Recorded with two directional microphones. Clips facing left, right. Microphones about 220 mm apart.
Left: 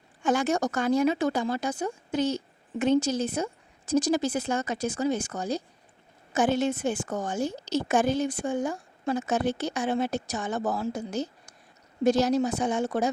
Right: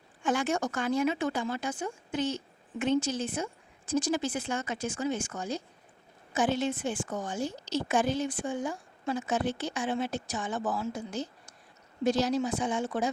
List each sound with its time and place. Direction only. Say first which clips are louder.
0.2 s speech: left 4 dB; 40° left (ahead or behind)